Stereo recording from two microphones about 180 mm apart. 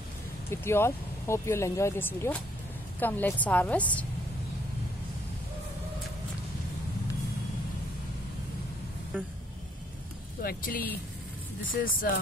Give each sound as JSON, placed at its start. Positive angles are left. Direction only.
{"t": 0.5, "sound": "speech", "side_deg": 15}
{"t": 10.4, "sound": "speech", "side_deg": 50}